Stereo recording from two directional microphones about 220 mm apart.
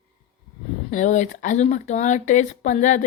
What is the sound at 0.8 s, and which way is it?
Speech, 35° left (ahead or behind).